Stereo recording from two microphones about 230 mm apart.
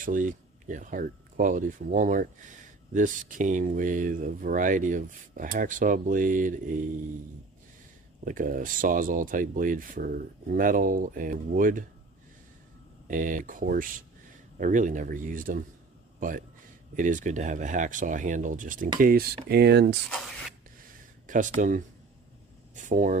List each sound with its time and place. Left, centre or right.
0.0 s speech: right
8.2 s speech: right
13.1 s speech: right
17.0 s speech: right
20.1 s speech: centre
21.2 s speech: right
22.7 s a sound: right